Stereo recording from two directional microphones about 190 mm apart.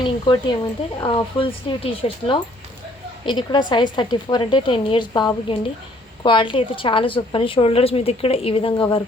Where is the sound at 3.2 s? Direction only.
25° left (ahead or behind).